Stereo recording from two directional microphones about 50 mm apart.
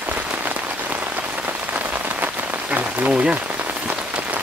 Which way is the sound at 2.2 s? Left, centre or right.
Right.